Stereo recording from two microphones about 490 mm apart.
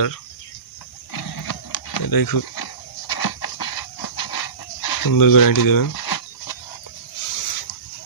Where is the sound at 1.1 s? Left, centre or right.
Left.